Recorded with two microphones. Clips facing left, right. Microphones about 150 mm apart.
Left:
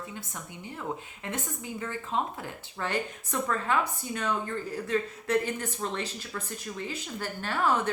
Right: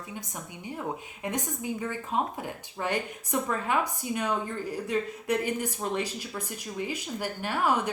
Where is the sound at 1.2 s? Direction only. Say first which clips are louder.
Right 4 dB; 15° right (ahead or behind).